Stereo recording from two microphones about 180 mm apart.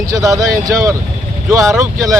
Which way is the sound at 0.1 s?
20° right (ahead or behind).